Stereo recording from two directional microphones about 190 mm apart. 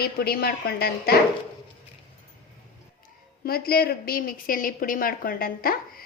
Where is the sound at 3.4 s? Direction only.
55° left (ahead or behind).